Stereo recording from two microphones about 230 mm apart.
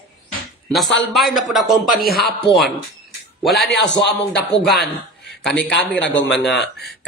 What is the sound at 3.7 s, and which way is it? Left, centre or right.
Speech, left.